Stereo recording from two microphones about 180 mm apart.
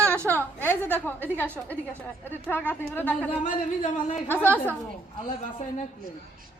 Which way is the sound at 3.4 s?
45° left (ahead or behind).